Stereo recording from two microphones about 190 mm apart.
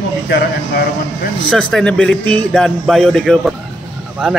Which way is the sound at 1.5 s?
5° left (ahead or behind).